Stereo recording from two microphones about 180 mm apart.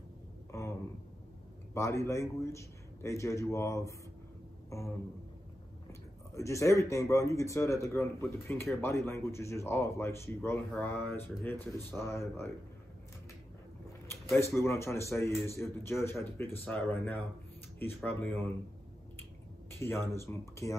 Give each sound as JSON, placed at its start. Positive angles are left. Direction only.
{"t": 0.5, "sound": "a sound", "side_deg": 15}
{"t": 1.7, "sound": "speech", "side_deg": 15}
{"t": 4.6, "sound": "a sound", "side_deg": 15}
{"t": 5.9, "sound": "speech", "side_deg": 15}
{"t": 14.5, "sound": "speech", "side_deg": 15}
{"t": 20.1, "sound": "speech", "side_deg": 15}